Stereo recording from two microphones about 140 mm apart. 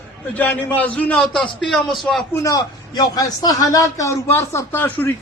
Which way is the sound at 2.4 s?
25° left (ahead or behind).